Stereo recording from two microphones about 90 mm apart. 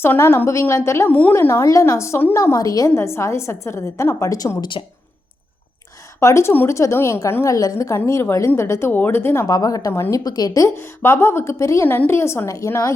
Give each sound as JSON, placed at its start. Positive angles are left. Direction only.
{"t": 0.0, "sound": "a woman's voice", "side_deg": 25}
{"t": 4.8, "sound": "speech", "side_deg": 80}
{"t": 6.1, "sound": "a woman's voice", "side_deg": 30}
{"t": 9.5, "sound": "a woman's voice", "side_deg": 40}
{"t": 9.9, "sound": "a woman's voice", "side_deg": 25}
{"t": 10.2, "sound": "speech", "side_deg": 45}
{"t": 10.8, "sound": "a woman's voice", "side_deg": 30}